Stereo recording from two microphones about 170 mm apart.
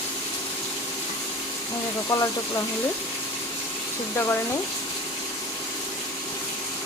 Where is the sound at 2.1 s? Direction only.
20° left (ahead or behind).